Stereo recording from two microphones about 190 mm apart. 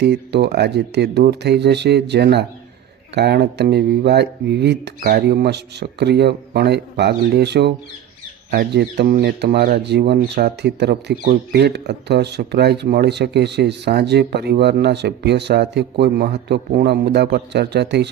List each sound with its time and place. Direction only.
0.0 s speech: 60° right (ahead or behind)